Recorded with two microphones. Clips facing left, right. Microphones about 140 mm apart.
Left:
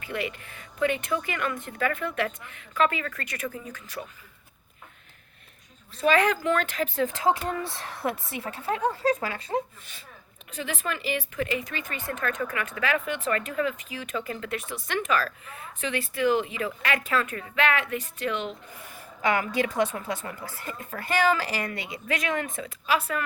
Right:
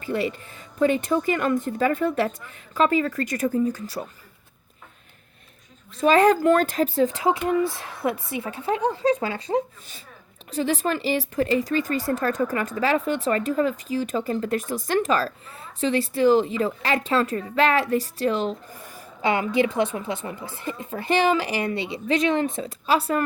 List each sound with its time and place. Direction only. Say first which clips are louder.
0.0 s speech: right 6 dB; 35° right (ahead or behind)
6.0 s speech: right 6 dB; 40° right (ahead or behind)
7.3 s a woman's voice: right 4 dB; 20° right (ahead or behind); by 18.9 s 35° right (ahead or behind)
19.2 s a woman's voice: right 4 dB; 25° right (ahead or behind)